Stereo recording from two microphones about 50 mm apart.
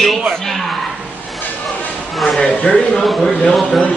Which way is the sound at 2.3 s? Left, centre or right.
Centre.